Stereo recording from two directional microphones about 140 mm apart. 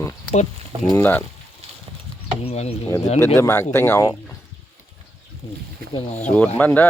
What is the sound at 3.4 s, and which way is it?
Speech, 15° left (ahead or behind).